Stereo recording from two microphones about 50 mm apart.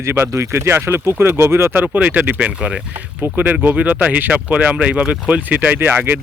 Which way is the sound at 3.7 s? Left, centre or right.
Right.